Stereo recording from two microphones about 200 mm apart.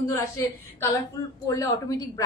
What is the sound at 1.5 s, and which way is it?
Speech, 15° left (ahead or behind).